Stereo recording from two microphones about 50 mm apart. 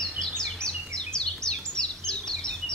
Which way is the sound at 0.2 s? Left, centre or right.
Centre.